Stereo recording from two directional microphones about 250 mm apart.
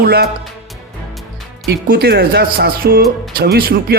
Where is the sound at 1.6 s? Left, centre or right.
Right.